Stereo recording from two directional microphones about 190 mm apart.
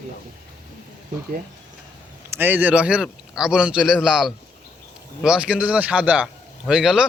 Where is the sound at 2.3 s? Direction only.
10° right (ahead or behind).